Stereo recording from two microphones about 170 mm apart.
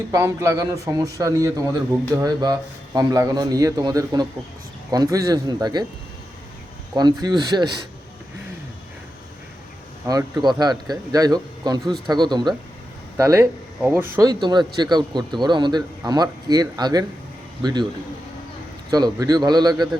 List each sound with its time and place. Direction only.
0.1 s a man's voice: 15° right (ahead or behind)
6.9 s a man's voice: 25° right (ahead or behind)
10.1 s a man's voice: 20° right (ahead or behind)
18.9 s a man's voice: 25° right (ahead or behind)